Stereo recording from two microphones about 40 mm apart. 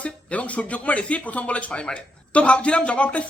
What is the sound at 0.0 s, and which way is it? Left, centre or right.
Speech, left.